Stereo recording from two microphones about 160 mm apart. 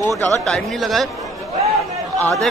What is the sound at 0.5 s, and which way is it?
Speech, centre (ahead or behind).